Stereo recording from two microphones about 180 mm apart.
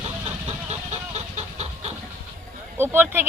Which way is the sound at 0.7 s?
40° right (ahead or behind).